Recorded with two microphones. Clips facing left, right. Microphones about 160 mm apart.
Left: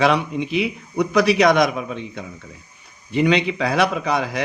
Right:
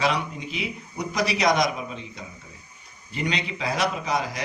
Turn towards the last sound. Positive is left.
turn(degrees=65)  # may be behind; listen again after turning